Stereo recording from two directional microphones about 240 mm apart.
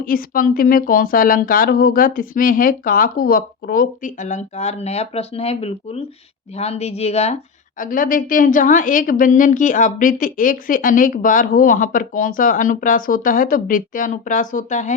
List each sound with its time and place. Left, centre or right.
0.0 s a woman's voice: left